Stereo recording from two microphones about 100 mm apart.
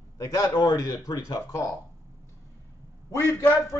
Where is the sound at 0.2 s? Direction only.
35° left (ahead or behind).